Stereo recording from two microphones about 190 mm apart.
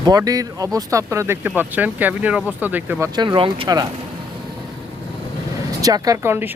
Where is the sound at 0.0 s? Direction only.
20° right (ahead or behind).